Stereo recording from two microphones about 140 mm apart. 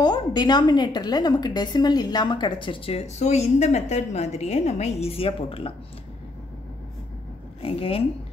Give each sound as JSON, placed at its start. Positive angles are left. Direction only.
{"t": 0.0, "sound": "a woman's voice", "side_deg": 30}
{"t": 7.6, "sound": "speech", "side_deg": 40}